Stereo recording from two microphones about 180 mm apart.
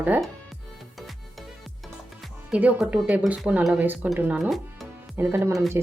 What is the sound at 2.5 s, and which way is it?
Speech, 5° right (ahead or behind).